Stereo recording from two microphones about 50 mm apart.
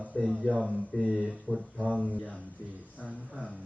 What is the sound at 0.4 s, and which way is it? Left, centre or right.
Speech, centre.